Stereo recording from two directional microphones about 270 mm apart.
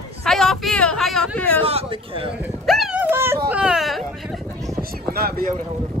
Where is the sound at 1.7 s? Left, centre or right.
Right.